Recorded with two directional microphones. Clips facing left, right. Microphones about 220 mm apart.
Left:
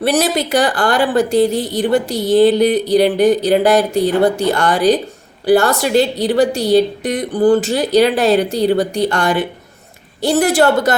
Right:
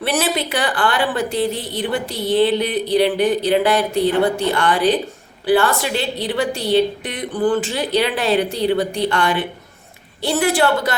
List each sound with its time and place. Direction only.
0.0 s a woman's voice: 40° left (ahead or behind)